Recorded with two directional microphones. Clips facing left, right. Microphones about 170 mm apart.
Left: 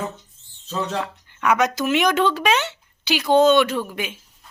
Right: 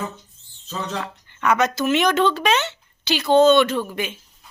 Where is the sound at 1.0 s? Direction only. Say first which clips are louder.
Even; 10° left (ahead or behind).